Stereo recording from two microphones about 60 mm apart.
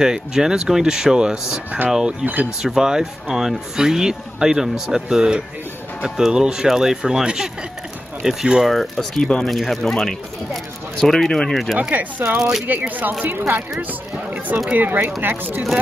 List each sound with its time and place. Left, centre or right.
0.0 s speech: centre
8.6 s speech: centre
11.9 s speech: right
12.3 s speech: centre
12.6 s speech: right
14.7 s speech: right